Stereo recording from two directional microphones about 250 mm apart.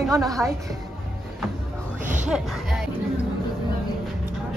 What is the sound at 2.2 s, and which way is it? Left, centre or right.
Speech, centre.